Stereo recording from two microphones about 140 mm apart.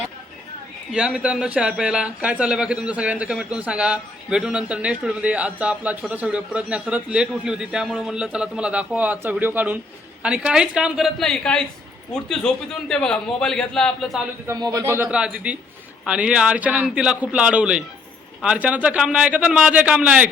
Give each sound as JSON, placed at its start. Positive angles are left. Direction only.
{"t": 0.9, "sound": "a man's voice", "side_deg": -5}
{"t": 14.4, "sound": "speech", "side_deg": -25}